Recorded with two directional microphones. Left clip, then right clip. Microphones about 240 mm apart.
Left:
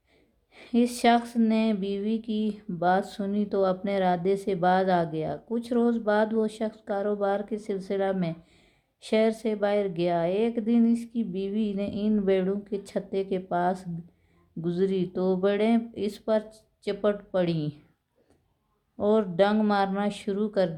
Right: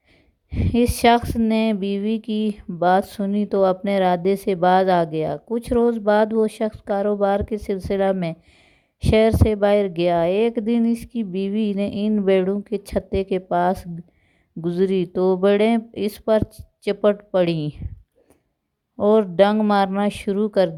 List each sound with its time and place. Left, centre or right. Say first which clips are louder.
0.5 s speech: right 6 dB; right
18.9 s speech: right 7 dB; right